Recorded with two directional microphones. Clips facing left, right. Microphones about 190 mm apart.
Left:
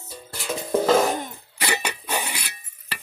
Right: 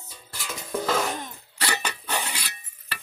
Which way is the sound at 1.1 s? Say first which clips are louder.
Left 3 dB; 15° left (ahead or behind).